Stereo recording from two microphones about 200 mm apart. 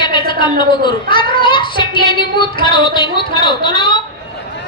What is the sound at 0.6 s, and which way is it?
Speech, 25° left (ahead or behind).